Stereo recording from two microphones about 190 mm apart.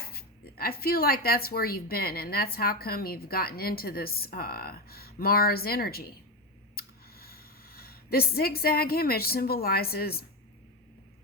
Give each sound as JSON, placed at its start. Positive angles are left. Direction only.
{"t": 0.0, "sound": "speech", "side_deg": 55}